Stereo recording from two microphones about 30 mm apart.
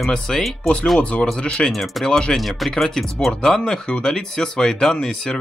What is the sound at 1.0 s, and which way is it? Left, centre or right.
Speech, left.